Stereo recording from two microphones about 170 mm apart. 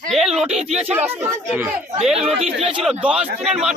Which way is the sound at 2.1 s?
35° right (ahead or behind).